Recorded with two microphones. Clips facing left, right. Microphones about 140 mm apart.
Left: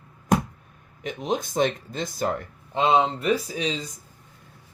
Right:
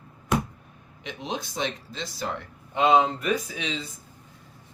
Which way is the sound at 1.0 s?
45° left (ahead or behind).